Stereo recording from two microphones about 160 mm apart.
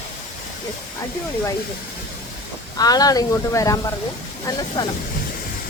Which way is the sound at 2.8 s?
25° left (ahead or behind).